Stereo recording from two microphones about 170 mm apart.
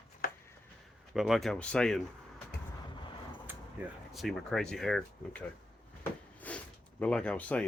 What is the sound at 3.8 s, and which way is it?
Speech, 10° right (ahead or behind).